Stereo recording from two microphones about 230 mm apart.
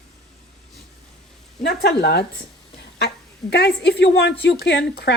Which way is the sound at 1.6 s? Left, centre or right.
Left.